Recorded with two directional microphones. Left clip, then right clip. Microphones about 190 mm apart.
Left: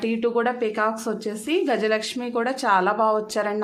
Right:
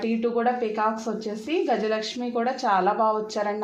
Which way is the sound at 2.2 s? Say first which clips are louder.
Left 1 dB; 30° left (ahead or behind).